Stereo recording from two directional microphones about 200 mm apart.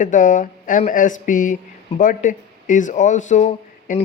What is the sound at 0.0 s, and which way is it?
Speech, 40° left (ahead or behind).